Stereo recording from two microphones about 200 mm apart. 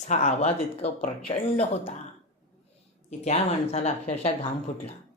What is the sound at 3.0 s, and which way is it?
Speech, 35° left (ahead or behind).